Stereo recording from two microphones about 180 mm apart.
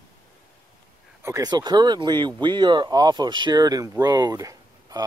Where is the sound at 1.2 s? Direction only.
20° right (ahead or behind).